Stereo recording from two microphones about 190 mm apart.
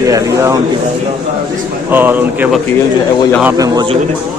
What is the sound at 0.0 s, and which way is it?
Speech, 15° right (ahead or behind).